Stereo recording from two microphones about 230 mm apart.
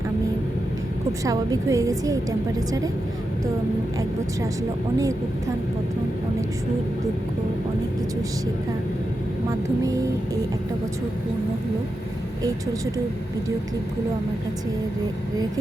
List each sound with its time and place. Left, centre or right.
1.2 s a woman's voice: centre